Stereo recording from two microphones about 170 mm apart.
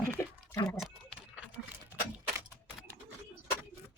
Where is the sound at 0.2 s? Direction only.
15° left (ahead or behind).